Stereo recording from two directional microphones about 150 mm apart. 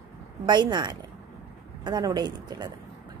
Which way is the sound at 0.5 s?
30° right (ahead or behind).